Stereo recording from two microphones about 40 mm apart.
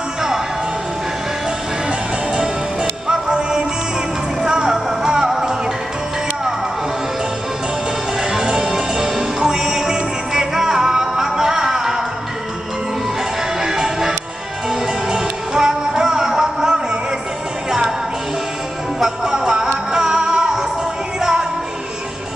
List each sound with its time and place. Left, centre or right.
1.9 s music: centre
8.2 s music: centre
13.6 s music: centre
18.9 s music: centre